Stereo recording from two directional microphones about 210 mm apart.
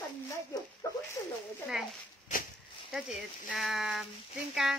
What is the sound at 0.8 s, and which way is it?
Speech, 15° left (ahead or behind).